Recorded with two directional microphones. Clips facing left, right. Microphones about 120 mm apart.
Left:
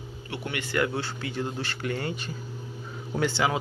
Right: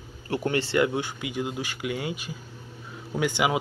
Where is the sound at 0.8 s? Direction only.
15° right (ahead or behind).